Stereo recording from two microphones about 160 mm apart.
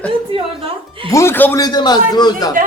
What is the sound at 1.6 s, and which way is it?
Speech, 25° left (ahead or behind).